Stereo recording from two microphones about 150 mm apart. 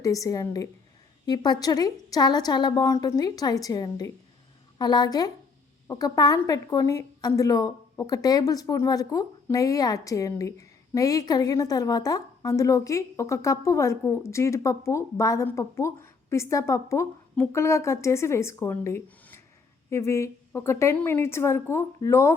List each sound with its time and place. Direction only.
0.0 s a woman's voice: 20° left (ahead or behind)